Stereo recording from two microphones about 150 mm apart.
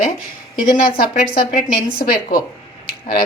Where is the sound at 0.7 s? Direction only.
75° left (ahead or behind).